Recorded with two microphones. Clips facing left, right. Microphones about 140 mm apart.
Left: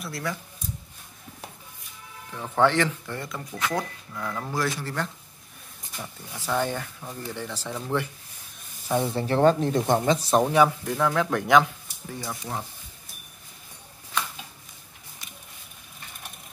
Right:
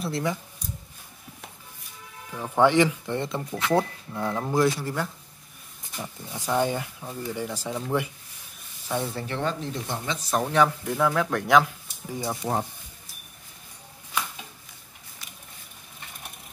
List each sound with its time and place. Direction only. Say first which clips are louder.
0.0 s speech: right 4 dB; 20° right (ahead or behind)
2.3 s speech: right 2 dB; 10° right (ahead or behind)
4.7 s speech: right 1 dB; 10° right (ahead or behind)
6.3 s speech: right 2 dB; 15° right (ahead or behind)
8.8 s speech: left 4 dB; 15° left (ahead or behind)
9.1 s speech: left 7 dB; 30° left (ahead or behind)
9.4 s speech: left 11 dB; 50° left (ahead or behind)
10.3 s speech: left 1 dB; 15° left (ahead or behind)
10.8 s speech: even; 5° right (ahead or behind)
12.1 s speech: right 4 dB; 20° right (ahead or behind)
14.1 s a sound: even; 5° right (ahead or behind)